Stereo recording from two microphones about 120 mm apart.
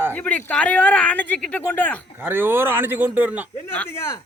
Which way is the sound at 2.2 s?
20° right (ahead or behind).